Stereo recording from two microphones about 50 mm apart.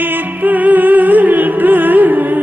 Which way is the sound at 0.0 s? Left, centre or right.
Right.